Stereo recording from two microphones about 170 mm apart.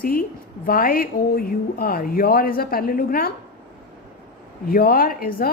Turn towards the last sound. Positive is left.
turn(degrees=60)  # may be behind; listen again after turning